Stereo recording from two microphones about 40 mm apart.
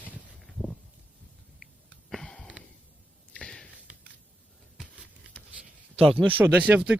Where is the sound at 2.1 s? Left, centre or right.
Centre.